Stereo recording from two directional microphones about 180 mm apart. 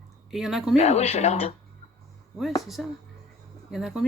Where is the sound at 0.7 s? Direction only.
35° left (ahead or behind).